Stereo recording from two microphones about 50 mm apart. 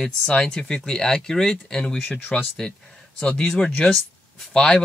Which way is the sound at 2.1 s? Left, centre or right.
Left.